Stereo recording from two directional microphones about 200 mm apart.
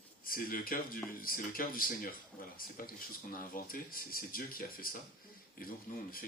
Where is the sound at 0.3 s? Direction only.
45° left (ahead or behind).